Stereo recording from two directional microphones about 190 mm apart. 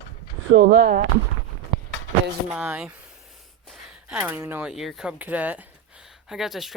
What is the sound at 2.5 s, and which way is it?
A man's voice, 5° right (ahead or behind).